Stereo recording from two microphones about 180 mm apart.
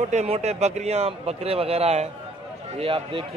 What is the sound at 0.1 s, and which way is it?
A man's voice, 40° right (ahead or behind).